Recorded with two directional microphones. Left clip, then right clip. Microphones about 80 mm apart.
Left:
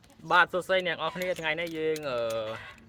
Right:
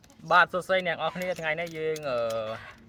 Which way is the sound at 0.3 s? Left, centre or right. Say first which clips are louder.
Right 2 dB; left.